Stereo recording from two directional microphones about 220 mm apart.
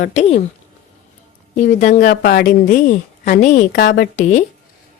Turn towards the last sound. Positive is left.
turn(degrees=30)  # may be behind; listen again after turning